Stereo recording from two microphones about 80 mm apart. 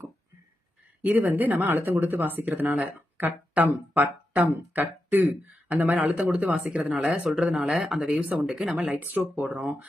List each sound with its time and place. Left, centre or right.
1.0 s speech: right